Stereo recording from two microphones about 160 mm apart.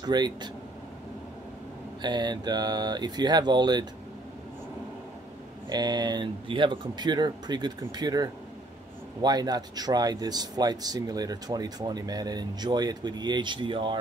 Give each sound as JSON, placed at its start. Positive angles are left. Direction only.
{"t": 0.0, "sound": "speech", "side_deg": -25}
{"t": 2.0, "sound": "speech", "side_deg": -25}
{"t": 5.7, "sound": "speech", "side_deg": -25}